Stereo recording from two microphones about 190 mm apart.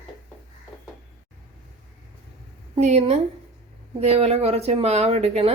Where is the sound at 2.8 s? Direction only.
35° right (ahead or behind).